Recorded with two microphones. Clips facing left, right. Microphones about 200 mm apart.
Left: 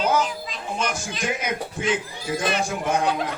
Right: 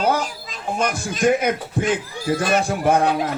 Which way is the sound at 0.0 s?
50° right (ahead or behind).